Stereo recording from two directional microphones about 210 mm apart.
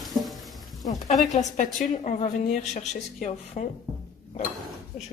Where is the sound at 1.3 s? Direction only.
35° left (ahead or behind).